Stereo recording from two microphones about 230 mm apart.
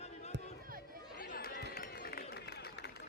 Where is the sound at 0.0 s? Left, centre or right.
Left.